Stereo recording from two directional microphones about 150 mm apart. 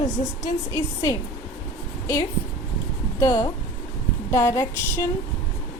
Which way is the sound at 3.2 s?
20° left (ahead or behind).